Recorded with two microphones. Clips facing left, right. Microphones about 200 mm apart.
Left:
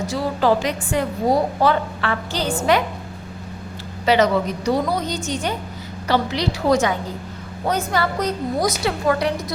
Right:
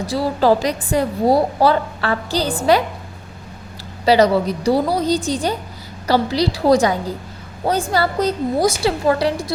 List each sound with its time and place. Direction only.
0.0 s a woman's voice: 35° right (ahead or behind)
4.0 s a woman's voice: 35° right (ahead or behind)